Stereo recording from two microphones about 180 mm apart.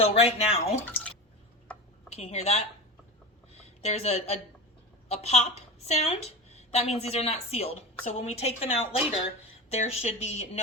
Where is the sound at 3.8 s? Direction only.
35° left (ahead or behind).